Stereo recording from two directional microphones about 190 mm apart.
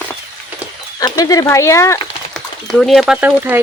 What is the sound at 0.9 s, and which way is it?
Speech, 20° left (ahead or behind).